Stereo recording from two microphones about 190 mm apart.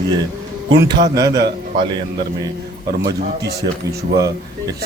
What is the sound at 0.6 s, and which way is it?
Speech, 25° right (ahead or behind).